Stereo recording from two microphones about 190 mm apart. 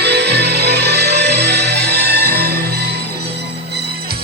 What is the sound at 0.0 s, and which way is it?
Music, 60° right (ahead or behind).